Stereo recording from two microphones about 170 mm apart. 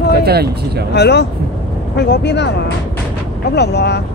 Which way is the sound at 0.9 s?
80° left.